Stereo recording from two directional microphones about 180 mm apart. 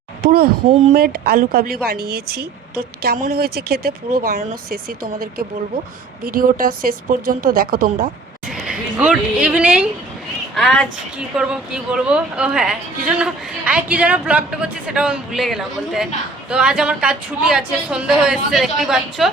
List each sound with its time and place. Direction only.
0.2 s a woman's voice: 55° right (ahead or behind)
8.4 s a woman's voice: centre (ahead or behind)